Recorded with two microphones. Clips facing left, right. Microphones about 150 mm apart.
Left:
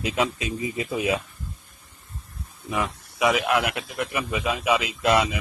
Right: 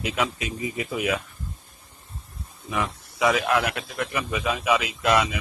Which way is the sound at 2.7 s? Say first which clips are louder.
Left 1 dB; 20° left (ahead or behind).